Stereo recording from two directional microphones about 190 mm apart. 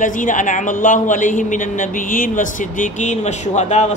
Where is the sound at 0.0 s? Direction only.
45° left (ahead or behind).